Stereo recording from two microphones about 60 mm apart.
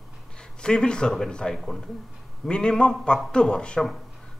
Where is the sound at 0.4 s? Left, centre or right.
Centre.